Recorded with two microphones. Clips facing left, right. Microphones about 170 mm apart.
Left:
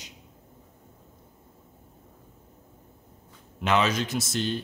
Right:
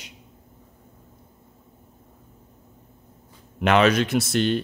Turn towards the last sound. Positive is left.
turn(degrees=-65)  # may be behind; listen again after turning